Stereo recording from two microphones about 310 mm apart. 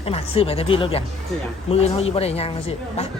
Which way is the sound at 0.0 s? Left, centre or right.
Centre.